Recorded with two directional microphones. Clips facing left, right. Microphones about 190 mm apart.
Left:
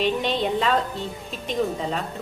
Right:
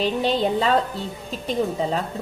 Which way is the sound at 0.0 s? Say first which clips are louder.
Right 2 dB; 35° right (ahead or behind).